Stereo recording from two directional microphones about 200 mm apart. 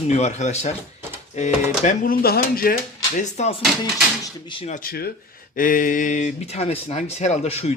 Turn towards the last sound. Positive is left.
turn(degrees=35)  # may be behind; listen again after turning